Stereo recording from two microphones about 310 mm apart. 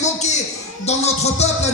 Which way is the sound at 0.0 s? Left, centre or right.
Left.